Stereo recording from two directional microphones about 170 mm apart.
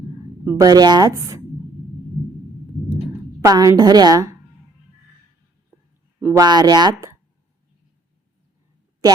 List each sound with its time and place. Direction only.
0.4 s a woman's voice: 20° right (ahead or behind)
3.4 s a woman's voice: 20° right (ahead or behind)
6.3 s a woman's voice: 25° right (ahead or behind)